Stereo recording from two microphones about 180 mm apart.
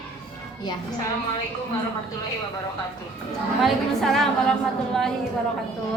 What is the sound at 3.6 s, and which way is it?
Speech, centre (ahead or behind).